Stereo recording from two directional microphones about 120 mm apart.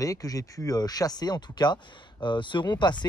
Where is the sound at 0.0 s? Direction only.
30° left (ahead or behind).